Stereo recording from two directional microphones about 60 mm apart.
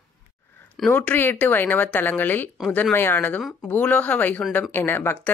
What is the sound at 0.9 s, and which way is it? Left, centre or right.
Speech, left.